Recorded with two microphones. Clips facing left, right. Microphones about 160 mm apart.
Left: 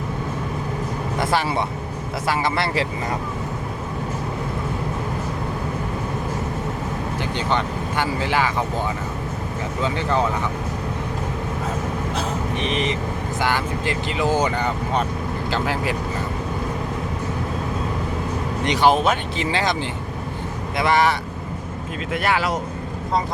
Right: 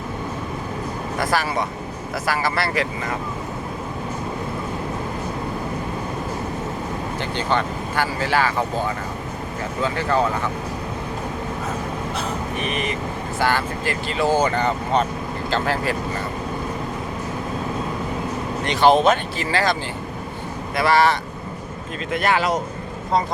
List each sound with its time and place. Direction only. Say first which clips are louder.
1.2 s speech: even; 25° left (ahead or behind)
7.2 s speech: right 1 dB; 15° left (ahead or behind)
9.8 s speech: right 1 dB; 20° left (ahead or behind)
12.5 s speech: left 3 dB; 25° left (ahead or behind)
18.6 s speech: right 2 dB; 15° left (ahead or behind)
19.4 s speech: right 1 dB; 20° left (ahead or behind)
20.7 s speech: right 1 dB; 20° left (ahead or behind); by 22.6 s 5° left (ahead or behind)